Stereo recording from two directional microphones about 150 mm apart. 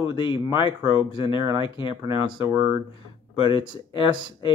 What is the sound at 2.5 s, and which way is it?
Speech, 15° right (ahead or behind).